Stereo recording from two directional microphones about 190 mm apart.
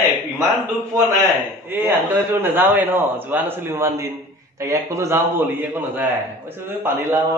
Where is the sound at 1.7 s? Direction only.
10° right (ahead or behind).